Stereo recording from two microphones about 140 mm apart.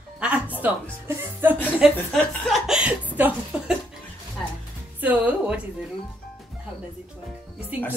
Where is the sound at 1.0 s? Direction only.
15° right (ahead or behind).